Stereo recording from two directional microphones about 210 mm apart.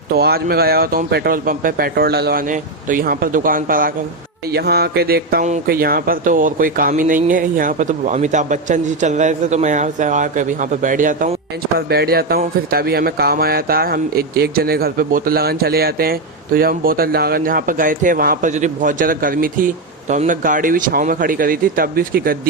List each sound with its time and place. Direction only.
0.1 s speech: 50° right (ahead or behind)